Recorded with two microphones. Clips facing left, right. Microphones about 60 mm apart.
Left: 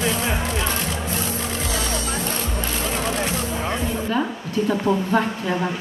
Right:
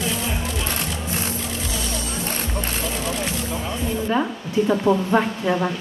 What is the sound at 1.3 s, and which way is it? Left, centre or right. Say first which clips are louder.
Music: left 3 dB; left.